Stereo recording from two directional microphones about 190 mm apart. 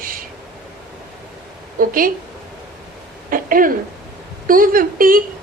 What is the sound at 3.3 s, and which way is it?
A woman's voice, 45° right (ahead or behind).